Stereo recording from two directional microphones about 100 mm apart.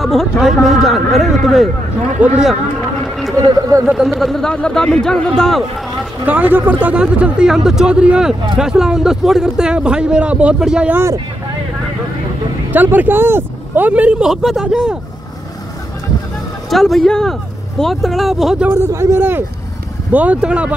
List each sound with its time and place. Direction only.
0.0 s a man's voice: centre (ahead or behind)
3.0 s a sound: centre (ahead or behind)
3.8 s a man's voice: 5° right (ahead or behind)
6.2 s speech: 15° right (ahead or behind)
10.9 s speech: 25° right (ahead or behind)
12.7 s speech: 15° right (ahead or behind)
16.7 s a man's voice: 5° left (ahead or behind)
18.6 s speech: 20° right (ahead or behind)